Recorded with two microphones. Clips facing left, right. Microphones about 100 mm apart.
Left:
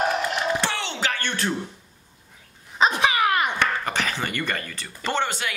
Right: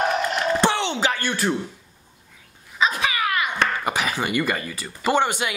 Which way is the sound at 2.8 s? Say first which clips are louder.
Left 2 dB; 30° left (ahead or behind).